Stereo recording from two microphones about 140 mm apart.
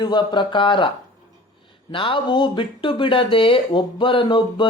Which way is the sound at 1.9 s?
40° left (ahead or behind).